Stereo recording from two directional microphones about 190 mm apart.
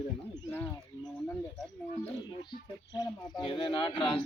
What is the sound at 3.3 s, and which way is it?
Speech, 30° left (ahead or behind).